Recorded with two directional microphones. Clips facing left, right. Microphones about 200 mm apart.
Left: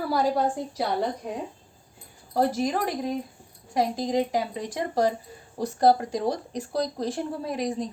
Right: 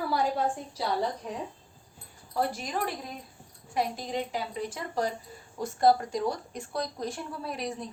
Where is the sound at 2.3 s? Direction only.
40° left (ahead or behind).